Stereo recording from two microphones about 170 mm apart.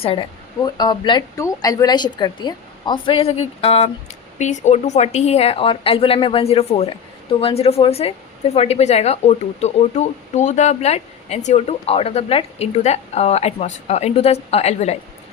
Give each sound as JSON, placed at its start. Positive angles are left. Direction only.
{"t": 0.0, "sound": "speech", "side_deg": 30}